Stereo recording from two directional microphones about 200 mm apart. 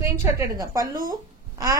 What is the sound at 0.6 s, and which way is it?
A woman's voice, 15° right (ahead or behind).